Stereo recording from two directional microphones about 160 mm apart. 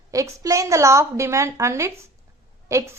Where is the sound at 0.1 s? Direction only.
20° right (ahead or behind).